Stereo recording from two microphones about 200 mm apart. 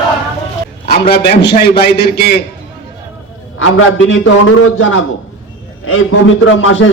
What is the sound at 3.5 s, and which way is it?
A man's voice, 80° left.